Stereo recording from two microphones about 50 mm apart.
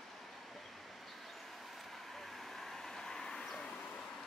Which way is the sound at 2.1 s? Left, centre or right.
Centre.